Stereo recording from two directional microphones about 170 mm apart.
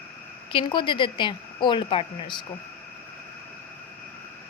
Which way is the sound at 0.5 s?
30° left (ahead or behind).